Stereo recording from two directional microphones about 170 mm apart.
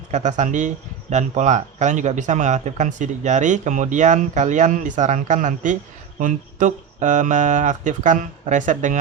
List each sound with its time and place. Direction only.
0.1 s speech: 45° right (ahead or behind)